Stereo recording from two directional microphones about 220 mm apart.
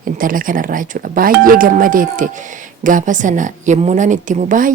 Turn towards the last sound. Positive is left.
turn(degrees=-35)  # may be behind; listen again after turning